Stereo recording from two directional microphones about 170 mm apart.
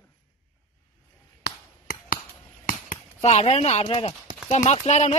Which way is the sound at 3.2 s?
40° left (ahead or behind).